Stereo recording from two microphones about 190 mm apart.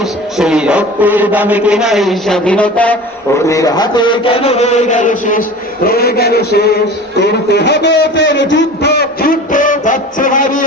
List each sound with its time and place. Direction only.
0.0 s a man's voice: 5° right (ahead or behind); by 10.6 s 45° left (ahead or behind)